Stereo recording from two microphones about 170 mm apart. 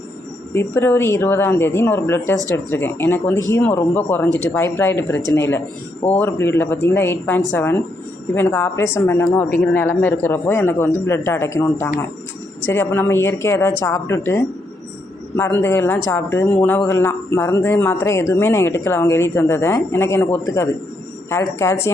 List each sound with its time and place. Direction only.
0.5 s speech: 15° left (ahead or behind)